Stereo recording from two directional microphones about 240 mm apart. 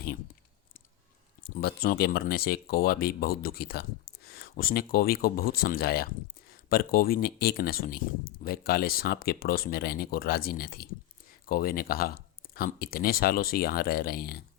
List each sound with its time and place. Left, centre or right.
1.5 s speech: left